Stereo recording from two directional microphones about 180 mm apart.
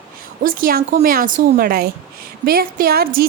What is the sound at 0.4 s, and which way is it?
A woman's voice, 50° right (ahead or behind).